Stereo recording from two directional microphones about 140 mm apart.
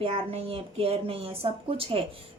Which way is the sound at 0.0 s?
45° right (ahead or behind).